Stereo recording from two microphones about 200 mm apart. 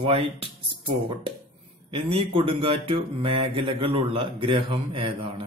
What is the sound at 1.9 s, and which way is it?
Mantra, 30° right (ahead or behind).